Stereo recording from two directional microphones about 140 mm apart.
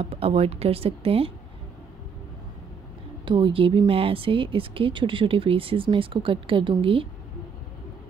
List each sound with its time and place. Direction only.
0.0 s speech: 45° right (ahead or behind)
3.3 s speech: 35° right (ahead or behind)